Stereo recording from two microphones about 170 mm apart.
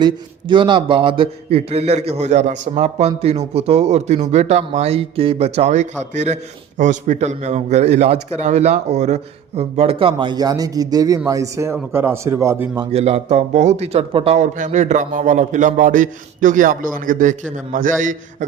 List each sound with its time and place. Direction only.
0.0 s speech: 30° right (ahead or behind)
12.9 s speech: 35° right (ahead or behind)
14.3 s a man's voice: 45° right (ahead or behind)